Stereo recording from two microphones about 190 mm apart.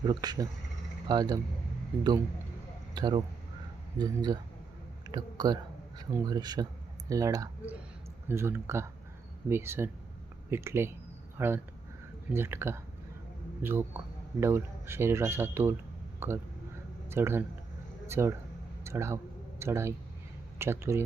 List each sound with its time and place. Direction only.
0.0 s speech: 20° right (ahead or behind)
2.9 s speech: 25° right (ahead or behind)